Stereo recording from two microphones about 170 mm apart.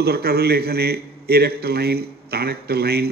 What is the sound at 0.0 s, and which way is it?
A man's voice, 70° right (ahead or behind).